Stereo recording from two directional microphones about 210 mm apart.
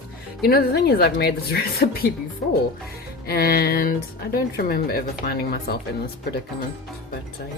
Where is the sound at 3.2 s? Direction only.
45° left (ahead or behind).